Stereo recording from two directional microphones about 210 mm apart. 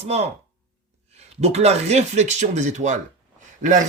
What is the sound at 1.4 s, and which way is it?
Speech, 30° right (ahead or behind).